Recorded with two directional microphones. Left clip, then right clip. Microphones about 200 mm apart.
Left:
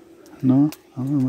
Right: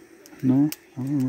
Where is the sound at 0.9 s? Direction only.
10° left (ahead or behind).